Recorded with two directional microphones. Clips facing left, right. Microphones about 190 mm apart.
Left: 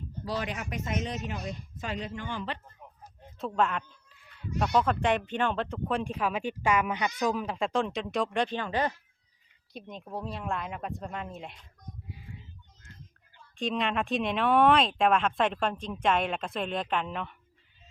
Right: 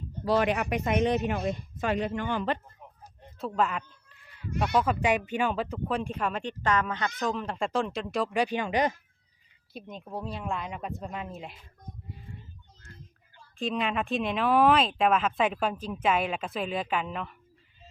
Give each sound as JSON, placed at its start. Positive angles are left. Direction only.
{"t": 0.3, "sound": "speech", "side_deg": -65}
{"t": 3.3, "sound": "speech", "side_deg": 0}
{"t": 9.7, "sound": "speech", "side_deg": 0}
{"t": 13.6, "sound": "speech", "side_deg": 0}